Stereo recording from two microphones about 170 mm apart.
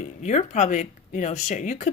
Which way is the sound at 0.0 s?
45° left (ahead or behind).